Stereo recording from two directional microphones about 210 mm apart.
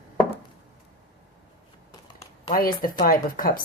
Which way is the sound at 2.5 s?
45° left (ahead or behind).